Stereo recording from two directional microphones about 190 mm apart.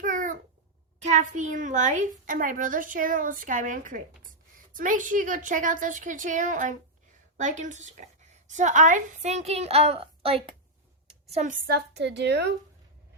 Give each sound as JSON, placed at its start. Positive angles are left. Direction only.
{"t": 0.0, "sound": "babbling", "side_deg": -45}
{"t": 1.0, "sound": "a woman's voice", "side_deg": -40}